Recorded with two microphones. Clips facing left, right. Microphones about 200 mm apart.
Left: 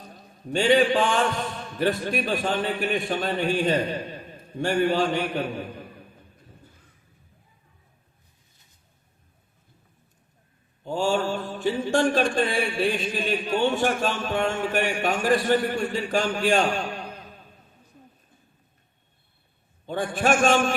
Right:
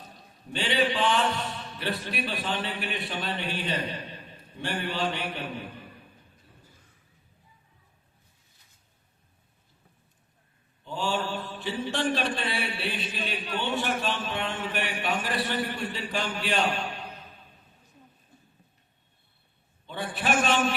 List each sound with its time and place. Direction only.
0.4 s mantra: 45° left (ahead or behind)
10.8 s mantra: 45° left (ahead or behind)
19.8 s mantra: 45° left (ahead or behind)